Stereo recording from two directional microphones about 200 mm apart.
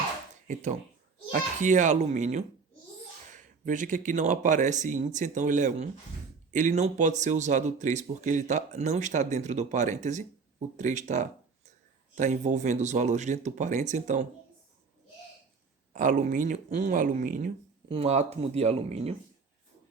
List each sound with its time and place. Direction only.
0.4 s speech: 40° right (ahead or behind)
15.9 s speech: 40° right (ahead or behind)
17.8 s speech: 30° right (ahead or behind)